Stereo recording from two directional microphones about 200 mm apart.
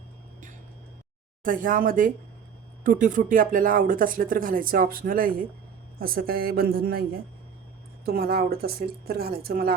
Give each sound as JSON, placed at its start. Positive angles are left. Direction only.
{"t": 1.5, "sound": "speech", "side_deg": -45}
{"t": 8.0, "sound": "speech", "side_deg": -50}